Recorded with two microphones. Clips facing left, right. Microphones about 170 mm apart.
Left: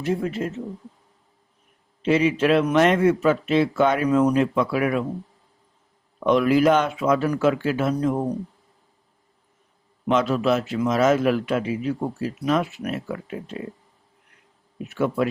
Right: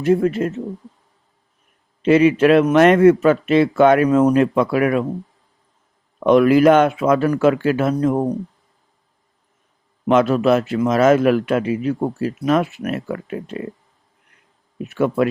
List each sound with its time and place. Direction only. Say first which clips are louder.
0.0 s a man's voice: right 8 dB; 55° right (ahead or behind)
2.0 s a man's voice: right 6 dB; 60° right (ahead or behind)
6.2 s a man's voice: right 6 dB; 55° right (ahead or behind)
10.1 s a man's voice: right 6 dB; 55° right (ahead or behind)
14.8 s a man's voice: right 5 dB; 60° right (ahead or behind)